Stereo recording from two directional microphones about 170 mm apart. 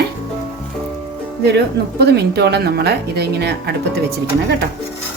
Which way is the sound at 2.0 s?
75° right (ahead or behind).